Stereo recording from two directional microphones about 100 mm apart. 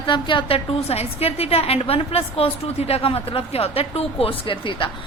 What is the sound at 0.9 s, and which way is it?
A woman's voice, 90° left.